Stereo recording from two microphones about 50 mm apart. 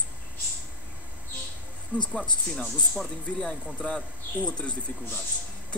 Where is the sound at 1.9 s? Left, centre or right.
Right.